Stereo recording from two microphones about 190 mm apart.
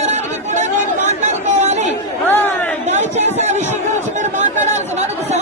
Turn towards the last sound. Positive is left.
turn(degrees=-35)  # may be behind; listen again after turning